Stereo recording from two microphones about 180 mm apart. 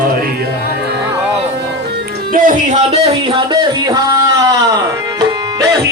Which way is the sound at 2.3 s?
50° right (ahead or behind).